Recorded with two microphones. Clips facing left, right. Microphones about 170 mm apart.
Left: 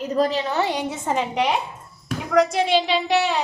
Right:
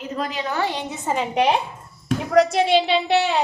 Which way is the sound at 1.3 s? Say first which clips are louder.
Right 5 dB; 25° right (ahead or behind).